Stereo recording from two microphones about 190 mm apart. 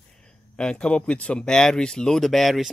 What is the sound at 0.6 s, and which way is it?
Speech, 5° left (ahead or behind).